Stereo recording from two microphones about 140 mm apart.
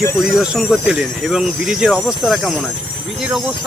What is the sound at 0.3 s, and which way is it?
Speech, 5° right (ahead or behind).